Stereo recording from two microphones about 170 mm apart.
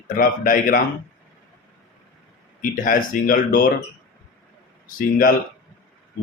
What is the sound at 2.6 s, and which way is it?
Speech, 55° left (ahead or behind).